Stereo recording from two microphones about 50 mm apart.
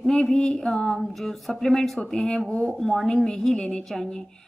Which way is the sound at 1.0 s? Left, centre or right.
Centre.